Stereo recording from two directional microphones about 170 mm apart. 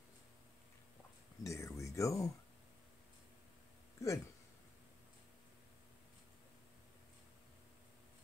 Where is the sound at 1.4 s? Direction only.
15° left (ahead or behind).